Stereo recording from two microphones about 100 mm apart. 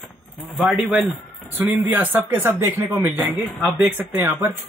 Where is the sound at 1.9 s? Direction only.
20° right (ahead or behind).